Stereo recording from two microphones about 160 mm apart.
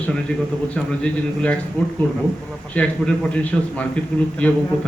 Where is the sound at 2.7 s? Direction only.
10° left (ahead or behind).